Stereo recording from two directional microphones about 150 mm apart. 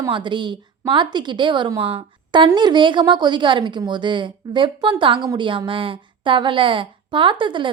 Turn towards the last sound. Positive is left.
turn(degrees=-35)  # may be behind; listen again after turning